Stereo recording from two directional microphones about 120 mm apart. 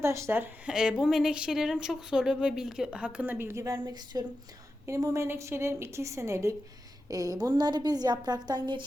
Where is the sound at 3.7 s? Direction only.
35° right (ahead or behind).